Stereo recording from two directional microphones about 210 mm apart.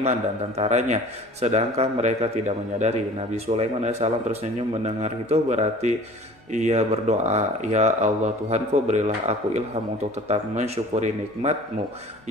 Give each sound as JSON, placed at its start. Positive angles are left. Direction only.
{"t": 0.6, "sound": "speech", "side_deg": -35}